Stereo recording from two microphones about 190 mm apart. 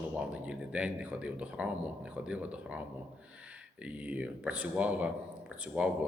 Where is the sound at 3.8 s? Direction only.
5° right (ahead or behind).